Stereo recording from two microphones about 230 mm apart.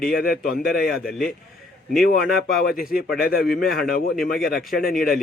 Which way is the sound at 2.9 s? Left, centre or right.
Left.